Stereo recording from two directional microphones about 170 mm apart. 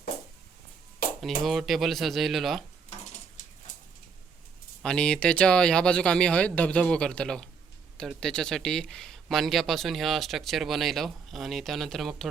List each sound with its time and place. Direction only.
1.0 s a sound: 60° left (ahead or behind)
1.5 s speech: centre (ahead or behind)
4.8 s speech: 5° left (ahead or behind)